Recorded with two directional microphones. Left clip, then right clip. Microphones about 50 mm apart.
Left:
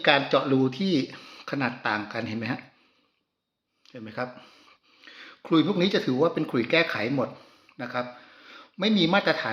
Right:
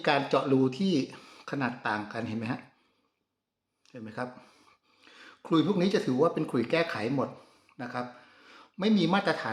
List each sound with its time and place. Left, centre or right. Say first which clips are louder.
0.0 s speech: left 5 dB; right
1.2 s a sound: left 6 dB; right
1.5 s speech: left 4 dB; centre
3.9 s speech: left 4 dB; centre
4.4 s a sound: left 5 dB; right
6.1 s speech: left 2 dB; right